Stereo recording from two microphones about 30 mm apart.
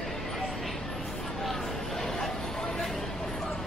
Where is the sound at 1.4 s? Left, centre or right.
Centre.